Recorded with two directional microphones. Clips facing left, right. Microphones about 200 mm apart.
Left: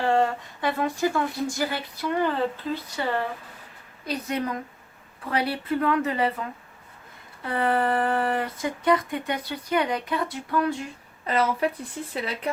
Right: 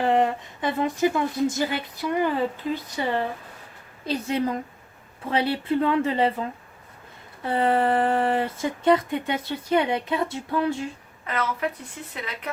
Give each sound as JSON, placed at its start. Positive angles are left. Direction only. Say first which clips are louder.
{"t": 0.0, "sound": "a woman's voice", "louder": "right 1 dB", "side_deg": -20}
{"t": 7.4, "sound": "speech", "louder": "right 2 dB", "side_deg": -25}
{"t": 11.3, "sound": "speech", "louder": "left 3 dB", "side_deg": 30}